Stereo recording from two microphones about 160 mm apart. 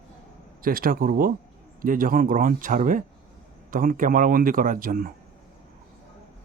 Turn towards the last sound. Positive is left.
turn(degrees=-65)  # may be behind; listen again after turning